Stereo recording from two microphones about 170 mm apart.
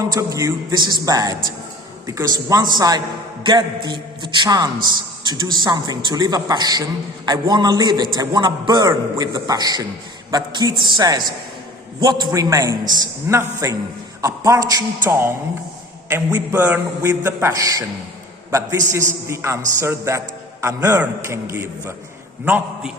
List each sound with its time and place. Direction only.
0.1 s a man's voice: 20° right (ahead or behind)
16.0 s a man's voice: 15° right (ahead or behind)